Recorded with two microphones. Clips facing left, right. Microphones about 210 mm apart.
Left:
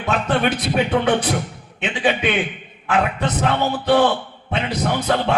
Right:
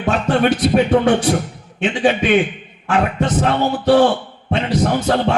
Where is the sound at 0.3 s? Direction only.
40° right (ahead or behind).